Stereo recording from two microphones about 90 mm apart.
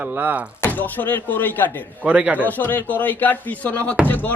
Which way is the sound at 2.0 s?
15° right (ahead or behind).